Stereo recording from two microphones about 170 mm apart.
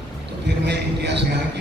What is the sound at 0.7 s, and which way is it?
Speech, 85° right.